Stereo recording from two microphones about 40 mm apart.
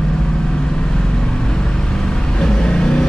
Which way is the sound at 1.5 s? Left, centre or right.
Centre.